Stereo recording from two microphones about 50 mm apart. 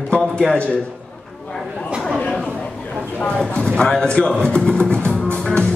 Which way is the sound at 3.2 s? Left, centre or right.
Centre.